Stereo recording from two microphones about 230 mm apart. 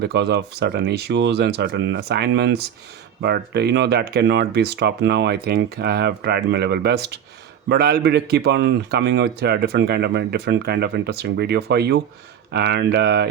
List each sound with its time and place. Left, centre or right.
0.0 s speech: right